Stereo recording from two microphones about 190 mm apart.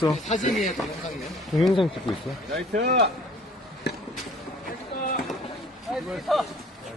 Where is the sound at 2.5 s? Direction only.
65° right (ahead or behind).